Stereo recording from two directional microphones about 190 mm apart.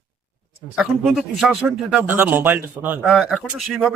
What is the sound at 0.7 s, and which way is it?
Speech, centre (ahead or behind).